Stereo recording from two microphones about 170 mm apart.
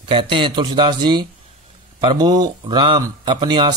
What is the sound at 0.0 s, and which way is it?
Speech, 30° right (ahead or behind).